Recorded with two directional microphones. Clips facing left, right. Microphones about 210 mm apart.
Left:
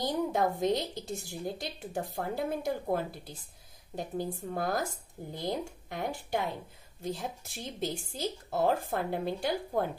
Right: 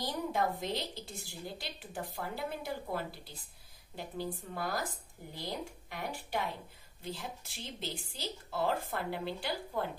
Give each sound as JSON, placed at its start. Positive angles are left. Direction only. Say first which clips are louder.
{"t": 0.3, "sound": "a woman's voice", "louder": "left 5 dB", "side_deg": 50}